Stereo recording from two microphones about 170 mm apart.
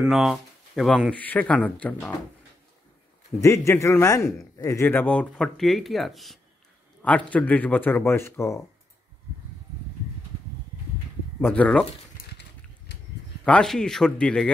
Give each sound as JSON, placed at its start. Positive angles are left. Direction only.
{"t": 0.0, "sound": "speech", "side_deg": 0}
{"t": 3.3, "sound": "speech", "side_deg": 20}
{"t": 11.4, "sound": "speech", "side_deg": 10}
{"t": 12.9, "sound": "a sound", "side_deg": 80}
{"t": 13.4, "sound": "speech", "side_deg": 5}